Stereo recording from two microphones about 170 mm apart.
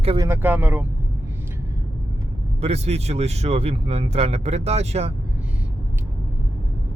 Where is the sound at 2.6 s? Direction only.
35° right (ahead or behind).